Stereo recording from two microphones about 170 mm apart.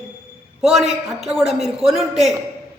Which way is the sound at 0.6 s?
5° right (ahead or behind).